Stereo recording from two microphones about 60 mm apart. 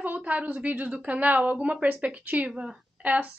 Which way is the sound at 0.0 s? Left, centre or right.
Right.